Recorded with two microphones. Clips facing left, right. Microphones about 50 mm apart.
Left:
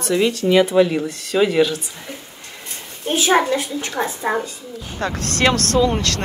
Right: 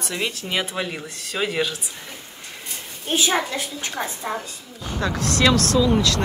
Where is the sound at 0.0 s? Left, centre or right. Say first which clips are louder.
Left 10 dB; centre.